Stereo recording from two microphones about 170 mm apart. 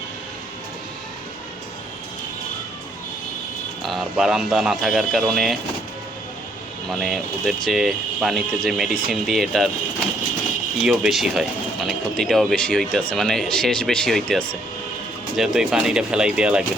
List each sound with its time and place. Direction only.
3.8 s speech: centre (ahead or behind)
6.8 s speech: centre (ahead or behind)
10.8 s speech: 5° right (ahead or behind)